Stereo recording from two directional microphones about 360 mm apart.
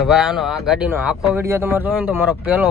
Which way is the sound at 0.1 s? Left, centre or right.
Centre.